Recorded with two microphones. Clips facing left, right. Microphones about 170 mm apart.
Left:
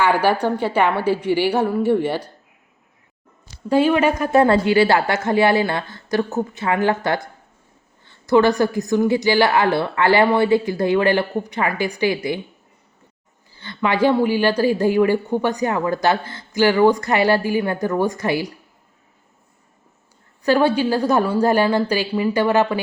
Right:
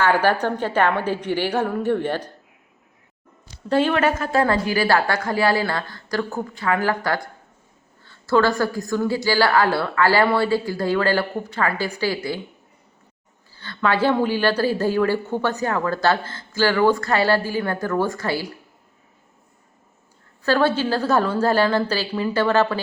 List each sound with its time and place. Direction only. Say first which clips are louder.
0.0 s a woman's voice: left 1 dB; 10° left (ahead or behind)
3.7 s a woman's voice: left 3 dB; 10° left (ahead or behind)
4.2 s a woman's voice: left 5 dB; 20° left (ahead or behind)
13.5 s a woman's voice: left 1 dB; 15° left (ahead or behind)
20.4 s a woman's voice: left 3 dB; 15° left (ahead or behind)